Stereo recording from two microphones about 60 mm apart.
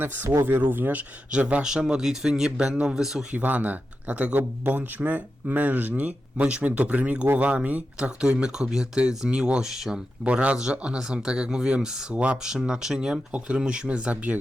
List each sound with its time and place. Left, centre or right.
0.0 s speech: right
1.6 s speech: centre
3.3 s speech: right; by 10.0 s centre
10.2 s speech: centre
12.1 s speech: right
12.4 s speech: centre